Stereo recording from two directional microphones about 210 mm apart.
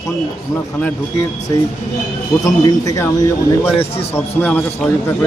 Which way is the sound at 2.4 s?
15° left (ahead or behind).